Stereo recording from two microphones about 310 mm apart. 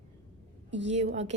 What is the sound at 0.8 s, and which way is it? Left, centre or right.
Speech, right.